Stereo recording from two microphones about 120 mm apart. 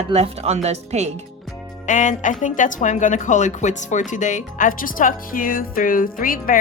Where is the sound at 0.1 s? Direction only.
65° right (ahead or behind).